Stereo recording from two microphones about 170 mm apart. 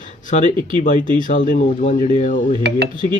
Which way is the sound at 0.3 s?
45° left (ahead or behind).